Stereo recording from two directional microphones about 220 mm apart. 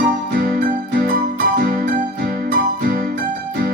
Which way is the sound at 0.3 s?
40° right (ahead or behind).